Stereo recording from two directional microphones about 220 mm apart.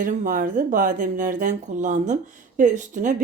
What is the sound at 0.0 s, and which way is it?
Speech, 35° right (ahead or behind).